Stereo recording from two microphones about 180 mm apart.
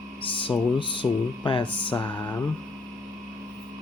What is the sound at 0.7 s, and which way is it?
Music, 30° left (ahead or behind).